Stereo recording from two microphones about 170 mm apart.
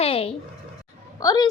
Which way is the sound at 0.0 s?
35° left (ahead or behind).